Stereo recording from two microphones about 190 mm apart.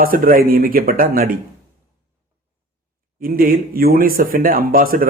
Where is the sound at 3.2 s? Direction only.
50° right (ahead or behind).